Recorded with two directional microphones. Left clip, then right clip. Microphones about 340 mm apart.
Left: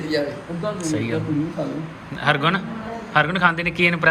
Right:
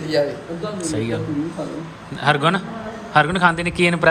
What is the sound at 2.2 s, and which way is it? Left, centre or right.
A man's voice, centre.